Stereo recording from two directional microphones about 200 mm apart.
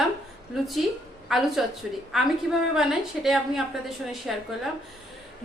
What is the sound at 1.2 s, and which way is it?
A woman's voice, centre (ahead or behind).